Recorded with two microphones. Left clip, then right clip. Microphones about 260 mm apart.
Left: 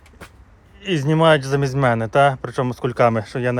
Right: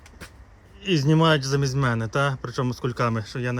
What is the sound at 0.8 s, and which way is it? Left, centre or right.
Speech, right.